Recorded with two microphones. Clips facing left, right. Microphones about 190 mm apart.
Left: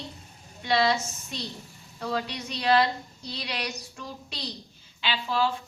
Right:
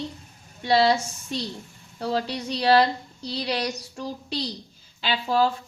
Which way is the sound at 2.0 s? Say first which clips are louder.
Right 4 dB; 35° right (ahead or behind).